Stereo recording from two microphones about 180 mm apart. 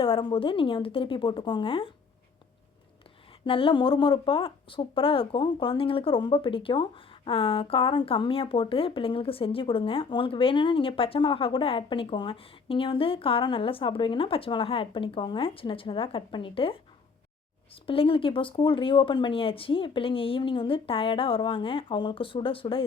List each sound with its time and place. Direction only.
0.0 s speech: 25° left (ahead or behind)
3.4 s speech: 30° left (ahead or behind)
17.8 s speech: 30° left (ahead or behind)